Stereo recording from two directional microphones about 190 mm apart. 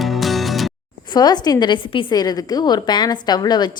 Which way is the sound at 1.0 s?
20° left (ahead or behind).